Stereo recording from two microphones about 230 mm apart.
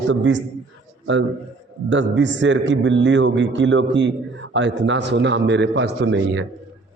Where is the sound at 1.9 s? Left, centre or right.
Right.